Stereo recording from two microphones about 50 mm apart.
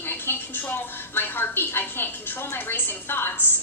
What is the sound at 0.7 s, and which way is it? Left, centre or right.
A woman's voice, left.